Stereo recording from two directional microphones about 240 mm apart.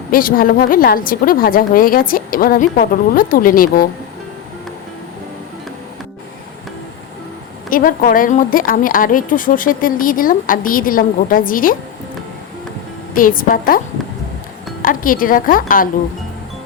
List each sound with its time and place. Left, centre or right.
0.1 s a woman's voice: left
7.7 s a woman's voice: left
13.1 s a woman's voice: left